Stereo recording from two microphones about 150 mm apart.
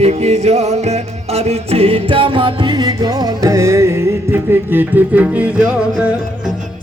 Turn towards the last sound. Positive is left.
turn(degrees=-5)  # may be behind; listen again after turning